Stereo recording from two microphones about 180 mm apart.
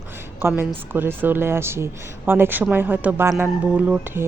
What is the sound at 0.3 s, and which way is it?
A woman's voice, 10° right (ahead or behind).